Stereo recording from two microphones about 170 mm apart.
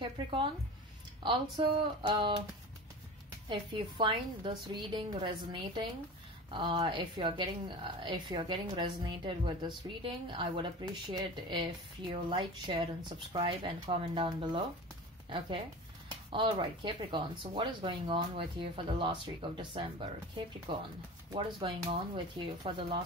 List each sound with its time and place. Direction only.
0.0 s a sound: 30° right (ahead or behind)
1.2 s a woman's voice: 30° right (ahead or behind)
3.4 s a woman's voice: 30° right (ahead or behind)